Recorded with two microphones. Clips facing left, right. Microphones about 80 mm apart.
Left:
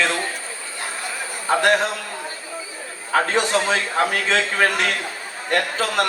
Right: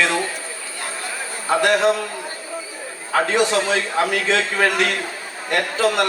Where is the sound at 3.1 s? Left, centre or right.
Left.